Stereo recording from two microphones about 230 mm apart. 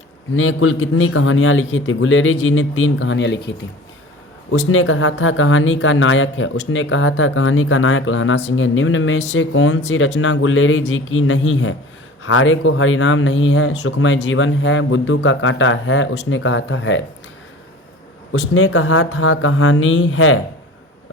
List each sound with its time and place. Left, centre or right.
0.3 s speech: left
4.5 s speech: left
18.3 s speech: left